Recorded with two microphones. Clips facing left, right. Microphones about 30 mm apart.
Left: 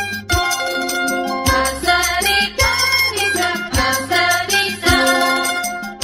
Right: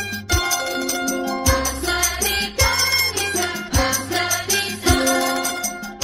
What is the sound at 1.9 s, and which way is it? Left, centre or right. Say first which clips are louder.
Music: left 6 dB; left.